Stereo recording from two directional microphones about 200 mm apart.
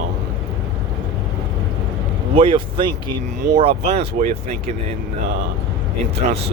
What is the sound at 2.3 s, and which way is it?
Speech, 25° right (ahead or behind).